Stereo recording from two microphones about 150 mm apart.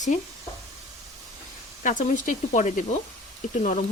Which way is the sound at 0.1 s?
50° left (ahead or behind).